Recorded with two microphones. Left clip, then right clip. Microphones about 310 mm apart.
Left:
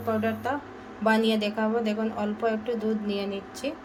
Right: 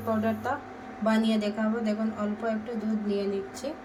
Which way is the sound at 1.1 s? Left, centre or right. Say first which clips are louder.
Left 3 dB; centre.